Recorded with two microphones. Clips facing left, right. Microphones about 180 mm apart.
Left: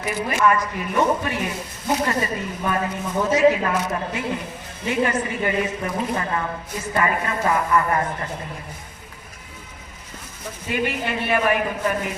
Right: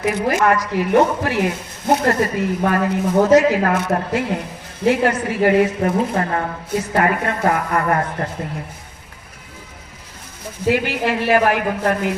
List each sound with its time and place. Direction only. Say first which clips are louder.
0.4 s speech: right 3 dB; 80° right; by 4.2 s 60° right (ahead or behind)
4.9 s a woman's voice: right 5 dB; 75° right (ahead or behind); by 8.3 s 55° right (ahead or behind)
10.7 s speech: right 6 dB; 90° right